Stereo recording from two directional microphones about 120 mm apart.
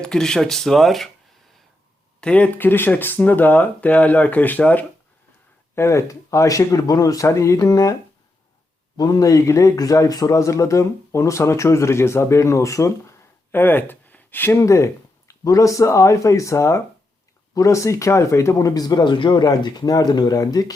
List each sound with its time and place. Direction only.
0.0 s speech: 5° left (ahead or behind)
2.2 s speech: 10° left (ahead or behind); by 7.9 s 30° left (ahead or behind)
9.0 s speech: 30° left (ahead or behind)